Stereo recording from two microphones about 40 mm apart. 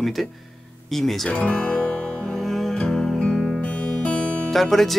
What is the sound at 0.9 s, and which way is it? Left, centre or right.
Speech, centre.